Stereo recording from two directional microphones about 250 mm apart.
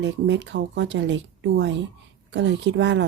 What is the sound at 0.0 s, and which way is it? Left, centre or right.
A woman's voice, right.